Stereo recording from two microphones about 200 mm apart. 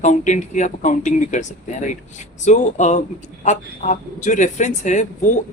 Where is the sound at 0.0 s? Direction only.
35° left (ahead or behind).